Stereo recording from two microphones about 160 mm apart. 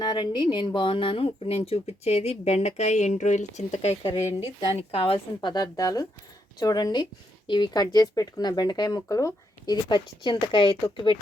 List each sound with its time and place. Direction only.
0.0 s speech: 25° left (ahead or behind)